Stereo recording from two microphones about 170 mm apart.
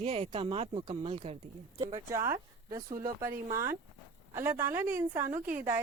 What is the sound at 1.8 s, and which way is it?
Speech, 20° right (ahead or behind).